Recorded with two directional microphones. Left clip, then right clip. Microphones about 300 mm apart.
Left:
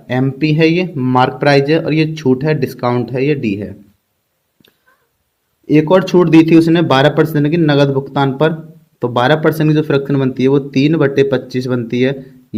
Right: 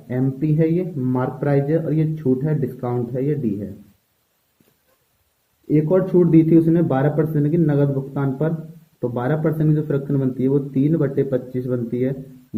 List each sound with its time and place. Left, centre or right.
0.1 s speech: left
5.7 s speech: left